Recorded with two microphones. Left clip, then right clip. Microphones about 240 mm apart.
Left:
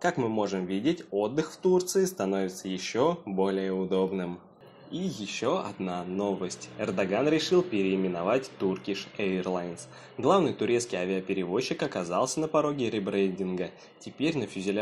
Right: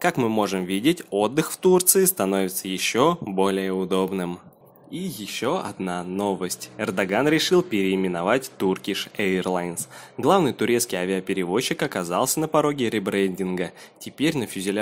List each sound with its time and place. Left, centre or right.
0.0 s speech: right